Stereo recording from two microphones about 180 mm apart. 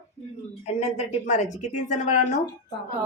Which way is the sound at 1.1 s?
40° left (ahead or behind).